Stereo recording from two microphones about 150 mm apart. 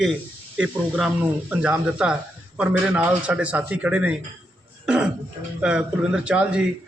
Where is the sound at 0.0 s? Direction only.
5° right (ahead or behind).